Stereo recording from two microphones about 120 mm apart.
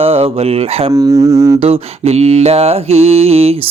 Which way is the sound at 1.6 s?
55° right (ahead or behind).